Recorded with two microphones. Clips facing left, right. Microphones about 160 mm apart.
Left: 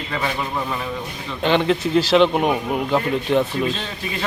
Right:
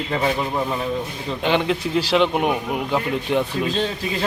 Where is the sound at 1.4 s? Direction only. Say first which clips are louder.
Left 3 dB; 10° right (ahead or behind).